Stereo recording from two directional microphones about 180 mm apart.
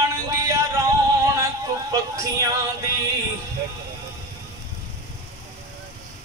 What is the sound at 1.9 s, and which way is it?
Speech, 20° right (ahead or behind).